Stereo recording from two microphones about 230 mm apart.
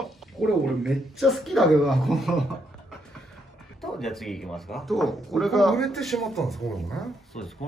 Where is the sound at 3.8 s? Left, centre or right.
Centre.